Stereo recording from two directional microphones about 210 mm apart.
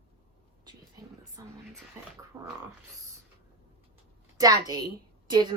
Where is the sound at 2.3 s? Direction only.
20° right (ahead or behind).